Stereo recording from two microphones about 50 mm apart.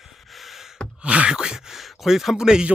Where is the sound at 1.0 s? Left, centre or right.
Right.